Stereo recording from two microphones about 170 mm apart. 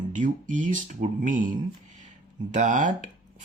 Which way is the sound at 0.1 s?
50° right (ahead or behind).